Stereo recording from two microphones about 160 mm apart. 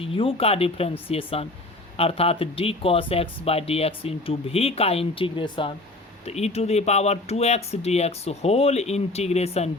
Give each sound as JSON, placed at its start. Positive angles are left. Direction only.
{"t": 0.0, "sound": "speech", "side_deg": 35}